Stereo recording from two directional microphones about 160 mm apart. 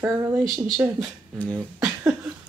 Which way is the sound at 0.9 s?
5° left (ahead or behind).